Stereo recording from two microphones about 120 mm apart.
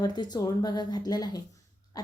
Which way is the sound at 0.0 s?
35° left (ahead or behind).